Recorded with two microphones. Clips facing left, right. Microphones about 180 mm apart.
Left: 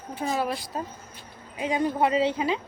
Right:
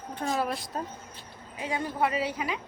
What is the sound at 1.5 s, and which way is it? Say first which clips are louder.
A woman's voice: left 5 dB; 20° left (ahead or behind).